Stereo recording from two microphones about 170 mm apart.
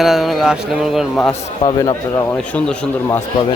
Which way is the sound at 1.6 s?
20° left (ahead or behind).